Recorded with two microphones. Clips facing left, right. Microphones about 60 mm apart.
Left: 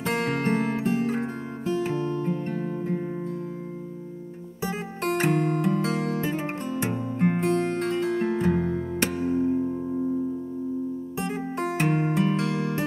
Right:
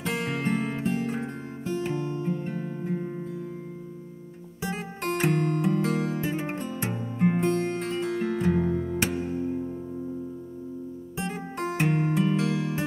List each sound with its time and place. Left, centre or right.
0.0 s music: left
5.1 s music: left
5.9 s music: left
6.9 s music: left
7.5 s music: left
8.5 s music: left
11.8 s music: left
12.4 s music: left